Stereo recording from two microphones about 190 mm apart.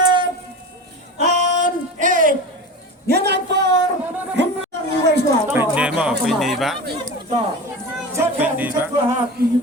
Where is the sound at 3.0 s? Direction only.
60° right (ahead or behind).